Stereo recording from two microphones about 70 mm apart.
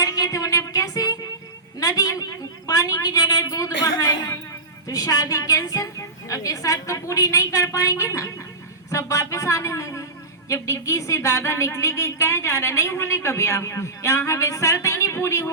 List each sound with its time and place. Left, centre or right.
0.0 s music: left
1.8 s a woman's voice: left